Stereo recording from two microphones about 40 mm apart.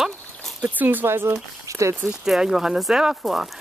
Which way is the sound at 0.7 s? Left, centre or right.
Right.